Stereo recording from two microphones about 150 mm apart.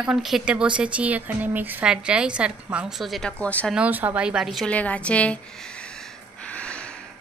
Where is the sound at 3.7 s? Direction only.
10° right (ahead or behind); by 5.4 s 10° left (ahead or behind).